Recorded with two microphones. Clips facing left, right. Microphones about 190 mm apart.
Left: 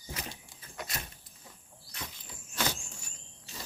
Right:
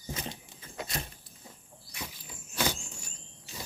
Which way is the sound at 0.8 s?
30° right (ahead or behind).